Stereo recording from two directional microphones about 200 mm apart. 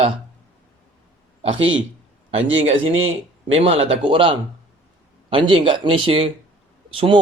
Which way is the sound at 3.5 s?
30° right (ahead or behind).